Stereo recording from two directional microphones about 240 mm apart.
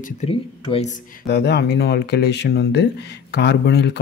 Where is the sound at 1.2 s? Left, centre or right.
Left.